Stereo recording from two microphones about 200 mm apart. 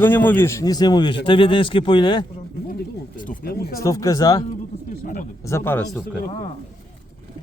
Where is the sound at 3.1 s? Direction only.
40° left (ahead or behind).